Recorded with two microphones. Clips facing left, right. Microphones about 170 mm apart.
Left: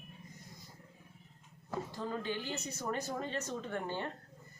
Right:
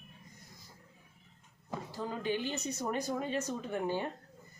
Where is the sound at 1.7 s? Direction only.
15° right (ahead or behind).